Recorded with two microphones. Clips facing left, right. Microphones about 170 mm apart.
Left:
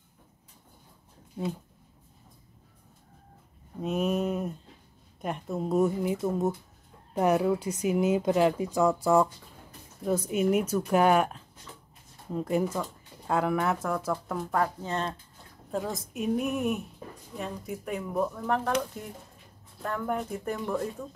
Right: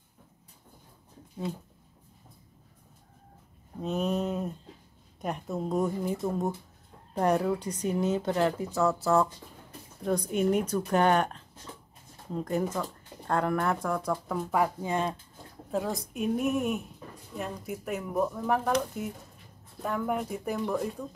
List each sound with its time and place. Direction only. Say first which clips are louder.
3.8 s speech: left 2 dB; 5° left (ahead or behind); by 15.1 s 10° right (ahead or behind)
15.7 s speech: right 1 dB; centre (ahead or behind)